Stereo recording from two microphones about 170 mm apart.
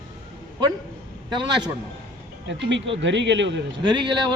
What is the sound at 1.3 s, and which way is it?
Speech, 25° right (ahead or behind).